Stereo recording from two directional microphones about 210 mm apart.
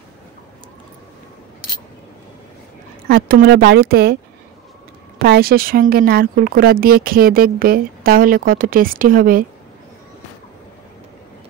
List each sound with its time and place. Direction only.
3.1 s speech: 45° right (ahead or behind)
5.2 s speech: 50° right (ahead or behind)